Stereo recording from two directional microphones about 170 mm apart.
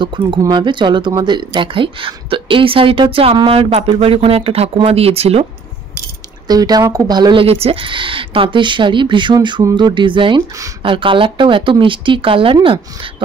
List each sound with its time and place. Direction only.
0.0 s speech: 25° right (ahead or behind)
6.4 s speech: 25° right (ahead or behind)